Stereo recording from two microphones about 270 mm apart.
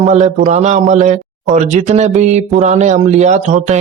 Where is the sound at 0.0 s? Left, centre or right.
Right.